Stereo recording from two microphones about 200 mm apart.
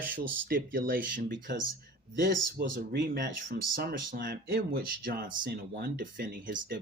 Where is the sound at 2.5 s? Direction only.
55° right (ahead or behind).